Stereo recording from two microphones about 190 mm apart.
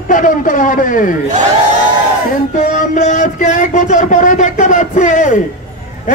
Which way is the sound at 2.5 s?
45° left (ahead or behind).